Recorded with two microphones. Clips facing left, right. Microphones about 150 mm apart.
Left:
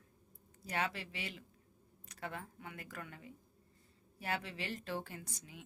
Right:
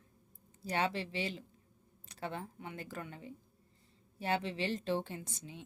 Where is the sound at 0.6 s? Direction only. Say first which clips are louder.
Right 4 dB; 30° right (ahead or behind).